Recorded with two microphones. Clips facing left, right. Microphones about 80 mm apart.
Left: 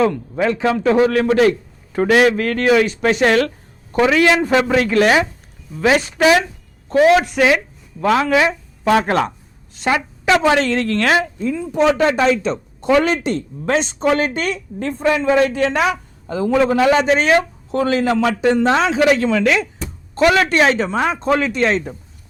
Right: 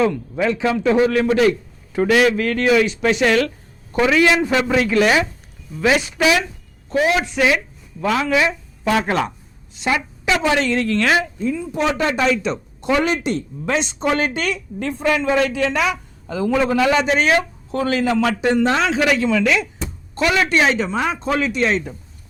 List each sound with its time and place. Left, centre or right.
0.0 s a man's voice: left
7.0 s a man's voice: left
10.6 s a man's voice: left